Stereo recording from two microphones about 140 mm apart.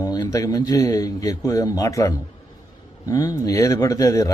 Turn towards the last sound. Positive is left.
turn(degrees=25)  # may be behind; listen again after turning